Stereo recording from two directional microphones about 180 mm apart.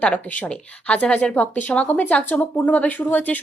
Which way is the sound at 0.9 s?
5° left (ahead or behind).